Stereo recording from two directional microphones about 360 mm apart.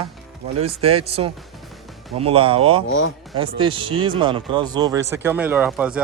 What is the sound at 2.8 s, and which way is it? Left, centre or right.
Speech, left.